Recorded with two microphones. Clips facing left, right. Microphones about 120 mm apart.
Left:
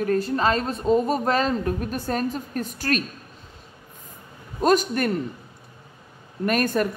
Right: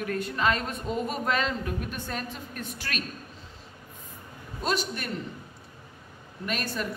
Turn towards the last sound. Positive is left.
turn(degrees=50)  # may be behind; listen again after turning